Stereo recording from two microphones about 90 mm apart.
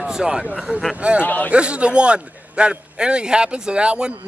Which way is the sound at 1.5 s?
10° right (ahead or behind).